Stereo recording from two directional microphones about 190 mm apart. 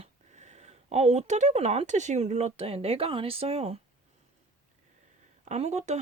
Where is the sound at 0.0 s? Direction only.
35° right (ahead or behind).